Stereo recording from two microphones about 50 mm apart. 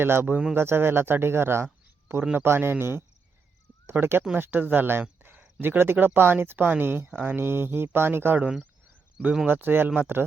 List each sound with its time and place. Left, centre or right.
0.0 s speech: right
4.0 s speech: right
9.5 s speech: right